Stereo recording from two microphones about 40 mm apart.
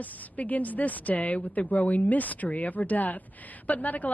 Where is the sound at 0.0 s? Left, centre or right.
Left.